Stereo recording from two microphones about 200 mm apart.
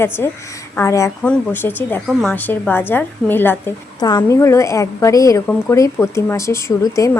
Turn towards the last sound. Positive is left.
turn(degrees=15)  # may be behind; listen again after turning